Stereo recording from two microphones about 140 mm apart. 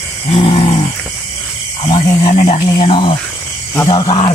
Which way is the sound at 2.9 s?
35° left (ahead or behind).